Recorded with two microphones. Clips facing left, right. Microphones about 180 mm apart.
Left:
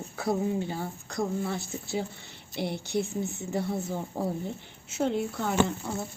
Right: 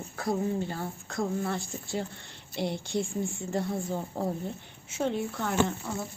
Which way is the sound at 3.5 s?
5° left (ahead or behind).